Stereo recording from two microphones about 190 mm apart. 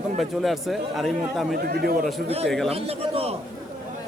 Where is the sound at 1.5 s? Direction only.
55° right (ahead or behind).